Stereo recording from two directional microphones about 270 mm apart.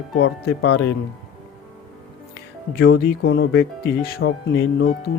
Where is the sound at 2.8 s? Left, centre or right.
Left.